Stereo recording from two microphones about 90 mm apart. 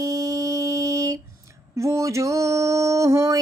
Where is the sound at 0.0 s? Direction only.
40° right (ahead or behind).